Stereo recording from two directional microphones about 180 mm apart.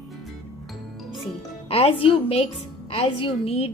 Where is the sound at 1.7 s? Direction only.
30° left (ahead or behind).